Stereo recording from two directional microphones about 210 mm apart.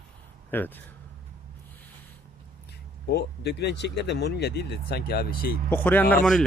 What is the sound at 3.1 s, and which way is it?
Speech, 50° left (ahead or behind).